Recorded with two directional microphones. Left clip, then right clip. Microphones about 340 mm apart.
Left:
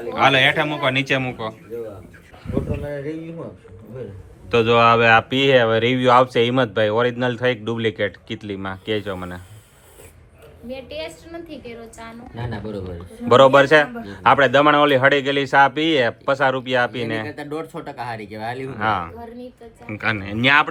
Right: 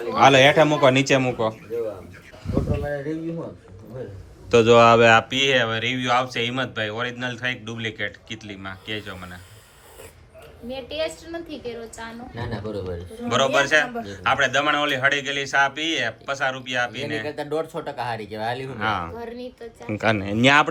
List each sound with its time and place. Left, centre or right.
0.1 s a man's voice: centre
4.5 s a man's voice: centre
10.7 s a woman's voice: right
12.5 s a man's voice: centre